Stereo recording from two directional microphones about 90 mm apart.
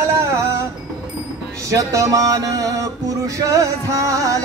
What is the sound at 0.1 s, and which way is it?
Music, 35° right (ahead or behind).